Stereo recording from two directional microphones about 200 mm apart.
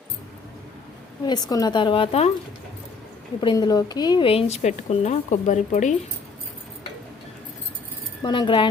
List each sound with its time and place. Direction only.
1.2 s a woman's voice: 20° left (ahead or behind)
3.4 s a woman's voice: 20° left (ahead or behind); by 5.9 s 40° left (ahead or behind)
8.2 s a woman's voice: 25° left (ahead or behind)